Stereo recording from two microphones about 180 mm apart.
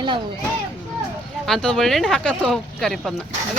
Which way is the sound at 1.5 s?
Centre (ahead or behind).